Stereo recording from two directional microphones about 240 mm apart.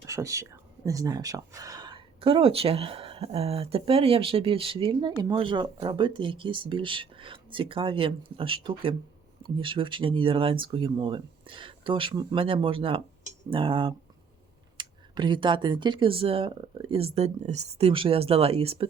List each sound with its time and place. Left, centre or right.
0.0 s speech: centre